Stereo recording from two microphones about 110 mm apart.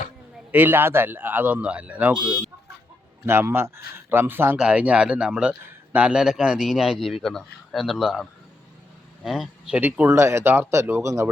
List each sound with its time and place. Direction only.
0.5 s a man's voice: 20° right (ahead or behind)
3.2 s speech: 20° right (ahead or behind)
4.5 s speech: 10° right (ahead or behind)
9.7 s speech: 15° right (ahead or behind)